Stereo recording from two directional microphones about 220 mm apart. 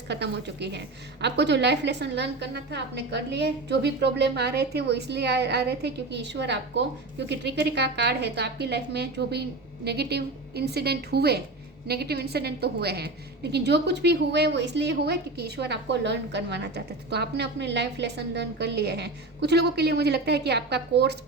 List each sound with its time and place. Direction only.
0.1 s a woman's voice: 50° right (ahead or behind)